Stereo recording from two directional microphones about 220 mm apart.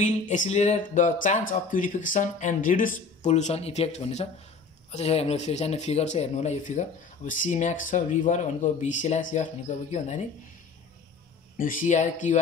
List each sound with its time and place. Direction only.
0.0 s speech: 35° left (ahead or behind)
11.5 s speech: 40° left (ahead or behind)